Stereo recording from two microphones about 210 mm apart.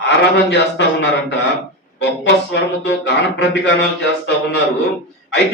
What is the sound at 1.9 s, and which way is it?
Speech, 55° left (ahead or behind).